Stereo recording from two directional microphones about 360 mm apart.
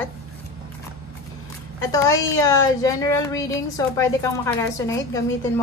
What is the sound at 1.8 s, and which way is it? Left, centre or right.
A woman's voice, centre.